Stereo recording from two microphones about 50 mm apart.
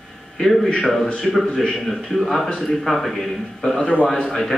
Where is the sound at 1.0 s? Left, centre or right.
Left.